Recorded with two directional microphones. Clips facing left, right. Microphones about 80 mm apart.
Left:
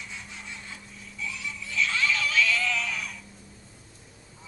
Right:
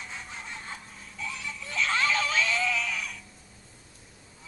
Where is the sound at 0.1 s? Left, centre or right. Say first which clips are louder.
Right 2 dB; right.